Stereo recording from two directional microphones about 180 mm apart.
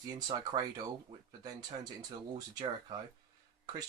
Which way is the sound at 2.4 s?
20° right (ahead or behind).